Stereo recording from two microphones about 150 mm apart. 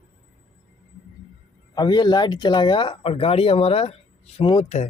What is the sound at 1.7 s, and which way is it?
Speech, 30° left (ahead or behind).